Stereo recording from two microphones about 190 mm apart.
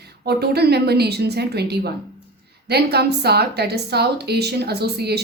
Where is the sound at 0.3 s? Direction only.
55° right (ahead or behind).